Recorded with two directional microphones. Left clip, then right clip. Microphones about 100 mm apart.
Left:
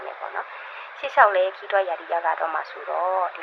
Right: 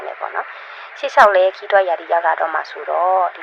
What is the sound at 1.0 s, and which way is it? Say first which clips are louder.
Speech: right 6 dB; 70° right (ahead or behind).